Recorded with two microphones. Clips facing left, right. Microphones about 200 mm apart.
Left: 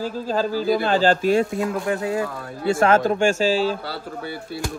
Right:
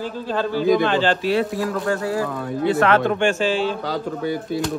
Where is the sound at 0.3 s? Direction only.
40° left (ahead or behind).